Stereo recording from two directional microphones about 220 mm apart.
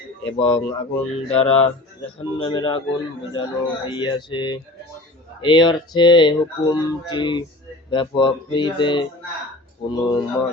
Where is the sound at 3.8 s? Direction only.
20° left (ahead or behind).